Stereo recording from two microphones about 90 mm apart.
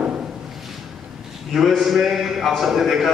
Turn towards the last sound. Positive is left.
turn(degrees=-5)  # may be behind; listen again after turning